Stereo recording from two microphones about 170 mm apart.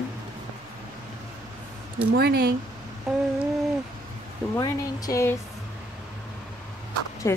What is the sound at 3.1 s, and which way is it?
Speech, centre (ahead or behind).